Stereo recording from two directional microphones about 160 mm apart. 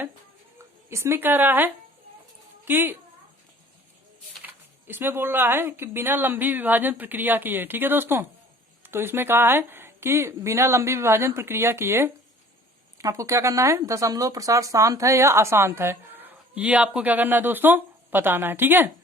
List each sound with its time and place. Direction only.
0.9 s a woman's voice: 15° right (ahead or behind)
4.9 s speech: 15° right (ahead or behind)